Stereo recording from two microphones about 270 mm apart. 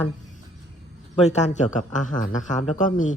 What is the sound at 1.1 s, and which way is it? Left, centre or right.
A man's voice, left.